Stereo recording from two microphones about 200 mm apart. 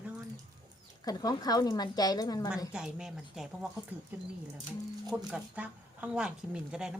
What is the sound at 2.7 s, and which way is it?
Speech, 5° right (ahead or behind).